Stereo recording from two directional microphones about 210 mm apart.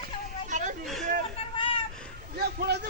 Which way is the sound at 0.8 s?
Centre (ahead or behind).